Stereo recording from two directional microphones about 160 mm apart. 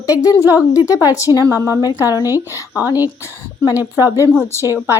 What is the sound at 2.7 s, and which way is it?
Speech, 10° right (ahead or behind).